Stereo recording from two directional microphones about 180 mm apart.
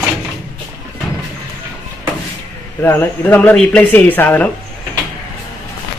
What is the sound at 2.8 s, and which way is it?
Speech, 15° left (ahead or behind).